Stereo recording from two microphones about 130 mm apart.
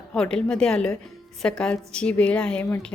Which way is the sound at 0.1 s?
5° left (ahead or behind).